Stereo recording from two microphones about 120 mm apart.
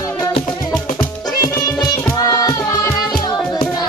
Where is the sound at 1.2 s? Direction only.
30° left (ahead or behind).